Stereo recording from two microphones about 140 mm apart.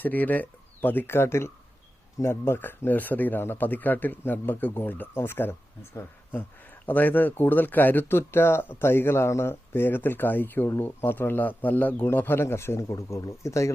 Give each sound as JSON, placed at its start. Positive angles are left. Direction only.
{"t": 0.0, "sound": "speech", "side_deg": 10}